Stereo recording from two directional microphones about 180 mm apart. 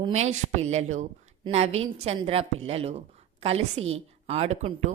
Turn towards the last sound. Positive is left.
turn(degrees=-35)  # may be behind; listen again after turning